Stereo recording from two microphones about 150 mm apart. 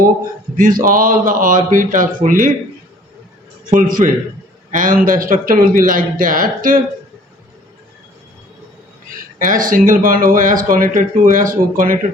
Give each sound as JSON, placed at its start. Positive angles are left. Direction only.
{"t": 0.5, "sound": "speech", "side_deg": -65}
{"t": 3.7, "sound": "a man's voice", "side_deg": -60}
{"t": 9.4, "sound": "speech", "side_deg": -65}